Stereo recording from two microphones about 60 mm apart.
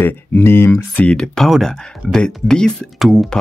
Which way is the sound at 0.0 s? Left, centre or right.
Left.